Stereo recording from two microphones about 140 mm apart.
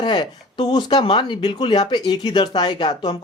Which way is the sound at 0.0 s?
35° left (ahead or behind).